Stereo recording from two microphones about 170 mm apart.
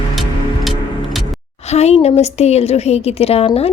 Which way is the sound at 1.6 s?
40° left (ahead or behind).